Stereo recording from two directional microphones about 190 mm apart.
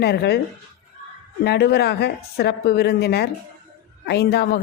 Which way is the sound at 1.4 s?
60° left (ahead or behind).